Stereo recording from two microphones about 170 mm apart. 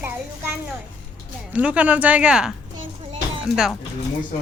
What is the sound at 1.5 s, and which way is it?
A woman's voice, 5° right (ahead or behind).